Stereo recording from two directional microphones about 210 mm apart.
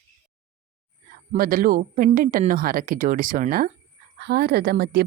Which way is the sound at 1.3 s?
45° right (ahead or behind).